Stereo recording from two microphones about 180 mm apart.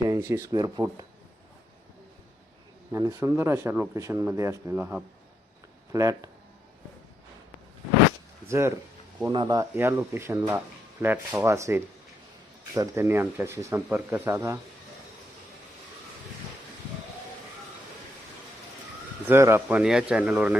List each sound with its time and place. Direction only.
0.1 s speech: 15° right (ahead or behind)
2.9 s speech: 15° right (ahead or behind)
8.4 s speech: 15° right (ahead or behind)
19.3 s speech: 15° right (ahead or behind)